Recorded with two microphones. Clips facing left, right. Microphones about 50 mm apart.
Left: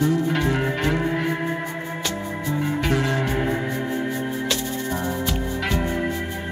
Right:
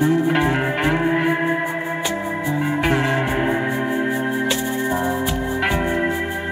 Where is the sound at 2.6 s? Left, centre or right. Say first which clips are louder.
Right 3 dB; right.